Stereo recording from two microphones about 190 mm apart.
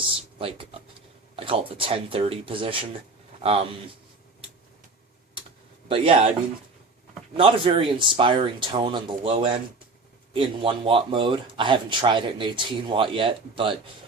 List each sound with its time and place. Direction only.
0.3 s speech: 30° right (ahead or behind)
5.9 s speech: 30° right (ahead or behind)
7.3 s speech: 25° right (ahead or behind)